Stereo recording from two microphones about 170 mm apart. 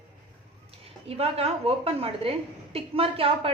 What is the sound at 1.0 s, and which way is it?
A woman's voice, 35° right (ahead or behind).